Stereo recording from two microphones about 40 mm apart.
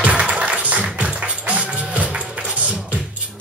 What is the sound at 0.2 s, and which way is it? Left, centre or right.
Music, right.